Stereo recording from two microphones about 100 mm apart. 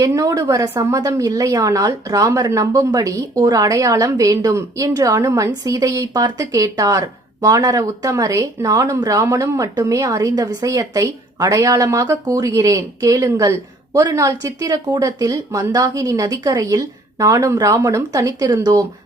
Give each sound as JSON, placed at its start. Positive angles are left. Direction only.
{"t": 0.0, "sound": "speech", "side_deg": -35}